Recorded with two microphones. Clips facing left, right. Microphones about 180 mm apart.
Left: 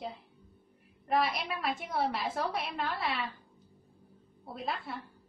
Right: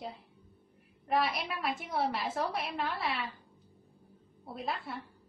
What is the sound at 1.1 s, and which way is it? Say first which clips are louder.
A woman's voice: left 1 dB; centre (ahead or behind).